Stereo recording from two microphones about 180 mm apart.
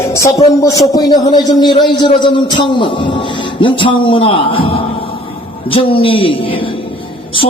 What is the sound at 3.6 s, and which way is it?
A man's voice, 25° left (ahead or behind).